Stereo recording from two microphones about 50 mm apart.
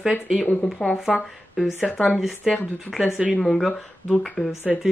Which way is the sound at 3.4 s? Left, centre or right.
Centre.